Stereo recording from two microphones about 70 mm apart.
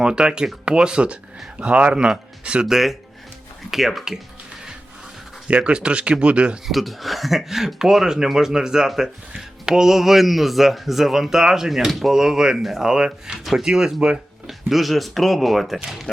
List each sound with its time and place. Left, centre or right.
0.0 s speech: centre
5.5 s speech: centre
6.7 s speech: centre